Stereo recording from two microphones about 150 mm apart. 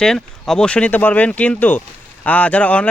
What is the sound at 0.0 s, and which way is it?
Speech, 5° left (ahead or behind).